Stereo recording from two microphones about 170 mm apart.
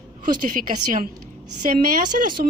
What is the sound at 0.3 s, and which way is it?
A woman's voice, 50° right (ahead or behind).